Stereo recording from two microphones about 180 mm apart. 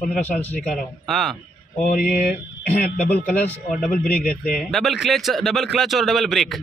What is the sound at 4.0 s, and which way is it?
Speech, 55° left (ahead or behind).